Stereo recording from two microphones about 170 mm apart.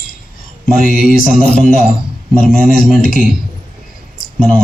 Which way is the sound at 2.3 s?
55° left (ahead or behind).